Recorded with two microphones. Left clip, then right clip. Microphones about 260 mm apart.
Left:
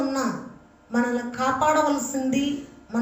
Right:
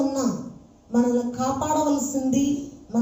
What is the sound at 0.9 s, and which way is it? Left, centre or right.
Speech, left.